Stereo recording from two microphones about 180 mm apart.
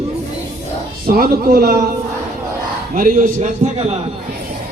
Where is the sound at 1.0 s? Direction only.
55° right (ahead or behind).